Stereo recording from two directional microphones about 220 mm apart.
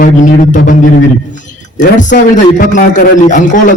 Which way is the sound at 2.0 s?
35° left (ahead or behind).